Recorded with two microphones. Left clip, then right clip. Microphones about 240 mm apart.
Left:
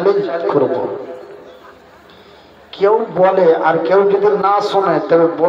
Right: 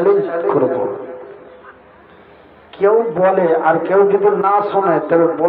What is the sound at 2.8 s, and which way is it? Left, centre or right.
A man's voice, left.